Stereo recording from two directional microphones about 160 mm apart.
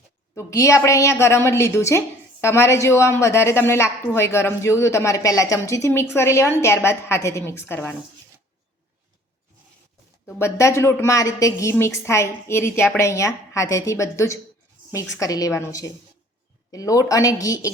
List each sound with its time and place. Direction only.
0.3 s a woman's voice: 20° left (ahead or behind)
10.2 s a woman's voice: 15° left (ahead or behind)